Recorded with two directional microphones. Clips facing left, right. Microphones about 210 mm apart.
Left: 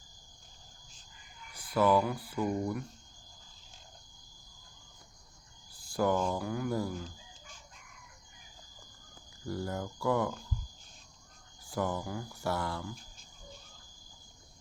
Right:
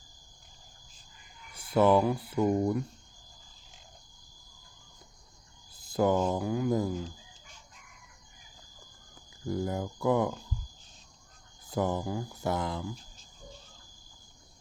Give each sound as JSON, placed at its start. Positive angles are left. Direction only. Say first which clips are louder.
{"t": 1.5, "sound": "speech", "louder": "right 4 dB", "side_deg": -25}
{"t": 5.7, "sound": "cricket", "louder": "right 3 dB", "side_deg": -20}
{"t": 6.3, "sound": "speech", "louder": "right 5 dB", "side_deg": -20}
{"t": 9.5, "sound": "speech", "louder": "right 4 dB", "side_deg": -15}
{"t": 11.7, "sound": "speech", "louder": "right 4 dB", "side_deg": -20}